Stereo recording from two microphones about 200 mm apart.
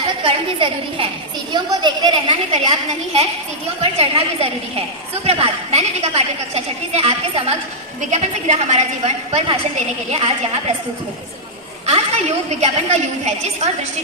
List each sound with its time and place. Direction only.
0.1 s speech: 25° right (ahead or behind)
3.8 s a woman's voice: 30° right (ahead or behind)
11.9 s a woman's voice: 35° right (ahead or behind)